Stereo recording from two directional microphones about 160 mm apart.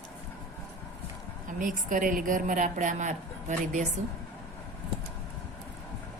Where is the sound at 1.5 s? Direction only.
55° right (ahead or behind).